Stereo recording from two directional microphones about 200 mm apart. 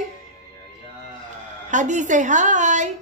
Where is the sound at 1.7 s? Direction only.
35° right (ahead or behind).